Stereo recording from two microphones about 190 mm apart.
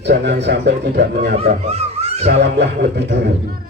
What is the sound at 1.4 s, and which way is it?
Speech, 35° right (ahead or behind).